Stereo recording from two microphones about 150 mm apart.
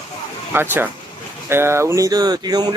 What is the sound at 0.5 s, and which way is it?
Speech, 15° right (ahead or behind).